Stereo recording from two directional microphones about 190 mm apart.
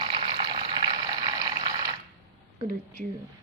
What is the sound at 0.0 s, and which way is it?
Water, 25° right (ahead or behind).